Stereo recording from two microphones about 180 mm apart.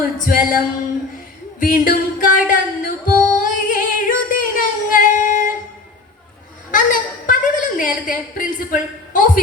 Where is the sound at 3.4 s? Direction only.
50° left (ahead or behind).